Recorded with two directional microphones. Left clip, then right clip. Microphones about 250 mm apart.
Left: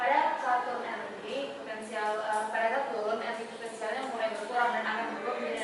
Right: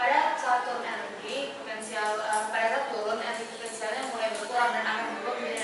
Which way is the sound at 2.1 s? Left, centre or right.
Centre.